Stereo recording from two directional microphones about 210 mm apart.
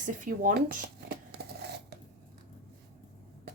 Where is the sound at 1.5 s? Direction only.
50° right (ahead or behind).